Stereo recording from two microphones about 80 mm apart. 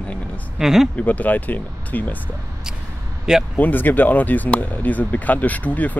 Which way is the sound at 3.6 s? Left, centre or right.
Left.